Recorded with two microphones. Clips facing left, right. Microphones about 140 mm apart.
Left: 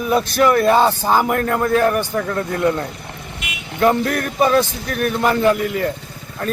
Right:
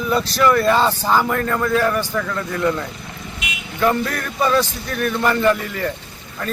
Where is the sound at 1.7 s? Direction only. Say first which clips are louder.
Left 3 dB; 50° left (ahead or behind).